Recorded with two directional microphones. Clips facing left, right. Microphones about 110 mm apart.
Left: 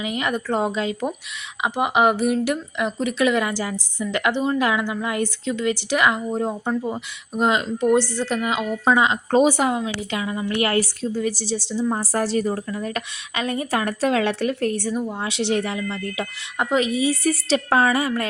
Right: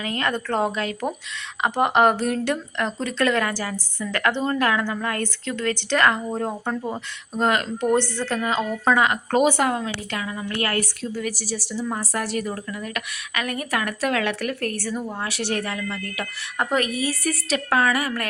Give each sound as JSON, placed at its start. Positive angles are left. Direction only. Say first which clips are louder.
{"t": 0.0, "sound": "speech", "louder": "left 1 dB", "side_deg": 15}
{"t": 1.6, "sound": "a woman's voice", "louder": "right 1 dB", "side_deg": 5}